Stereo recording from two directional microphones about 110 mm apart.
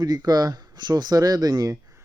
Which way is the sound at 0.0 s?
40° right (ahead or behind).